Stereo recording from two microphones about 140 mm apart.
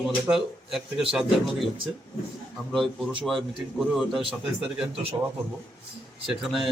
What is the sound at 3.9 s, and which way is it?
Speech, centre (ahead or behind).